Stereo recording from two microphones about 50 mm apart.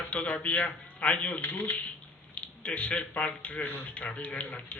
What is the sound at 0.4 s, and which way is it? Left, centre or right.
Speech, left.